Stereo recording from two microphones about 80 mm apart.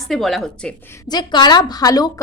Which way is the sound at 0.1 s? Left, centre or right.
Centre.